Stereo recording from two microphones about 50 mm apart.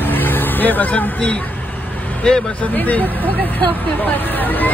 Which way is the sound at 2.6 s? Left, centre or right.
Left.